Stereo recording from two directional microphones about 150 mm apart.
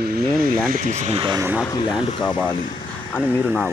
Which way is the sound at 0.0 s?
85° right.